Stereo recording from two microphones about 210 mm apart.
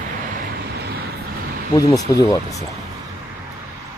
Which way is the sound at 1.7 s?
15° left (ahead or behind).